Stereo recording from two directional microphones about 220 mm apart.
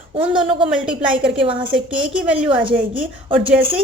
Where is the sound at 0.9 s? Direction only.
20° right (ahead or behind).